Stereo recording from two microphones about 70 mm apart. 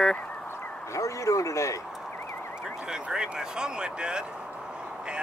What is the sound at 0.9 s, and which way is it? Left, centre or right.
Speech, left.